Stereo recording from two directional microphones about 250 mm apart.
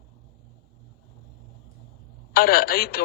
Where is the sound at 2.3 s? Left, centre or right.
Left.